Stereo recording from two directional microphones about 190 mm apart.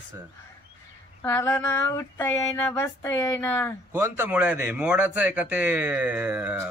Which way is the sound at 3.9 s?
15° right (ahead or behind).